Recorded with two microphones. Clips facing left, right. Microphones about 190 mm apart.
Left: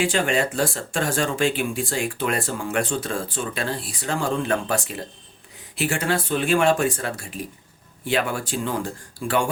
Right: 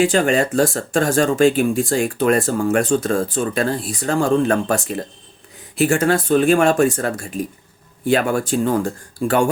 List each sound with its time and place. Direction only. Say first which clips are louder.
0.0 s speech: right 6 dB; 45° right (ahead or behind)